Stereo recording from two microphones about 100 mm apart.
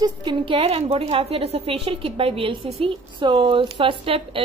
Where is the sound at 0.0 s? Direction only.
50° right (ahead or behind).